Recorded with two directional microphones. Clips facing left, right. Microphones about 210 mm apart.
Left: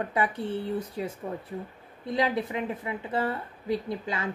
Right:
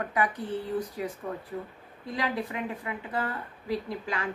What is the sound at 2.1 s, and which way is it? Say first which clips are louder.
A woman's voice: left 4 dB; 25° left (ahead or behind).